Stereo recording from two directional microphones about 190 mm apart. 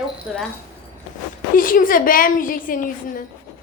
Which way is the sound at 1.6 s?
45° left (ahead or behind).